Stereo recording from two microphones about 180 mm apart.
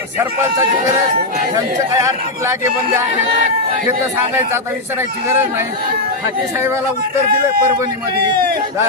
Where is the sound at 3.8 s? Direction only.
15° right (ahead or behind).